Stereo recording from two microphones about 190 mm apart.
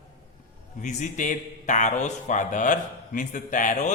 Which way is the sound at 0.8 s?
40° left (ahead or behind).